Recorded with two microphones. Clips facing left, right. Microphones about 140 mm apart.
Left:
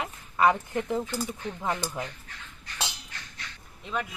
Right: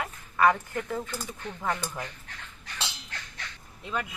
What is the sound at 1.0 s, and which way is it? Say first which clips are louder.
Speech: left 5 dB; 5° left (ahead or behind).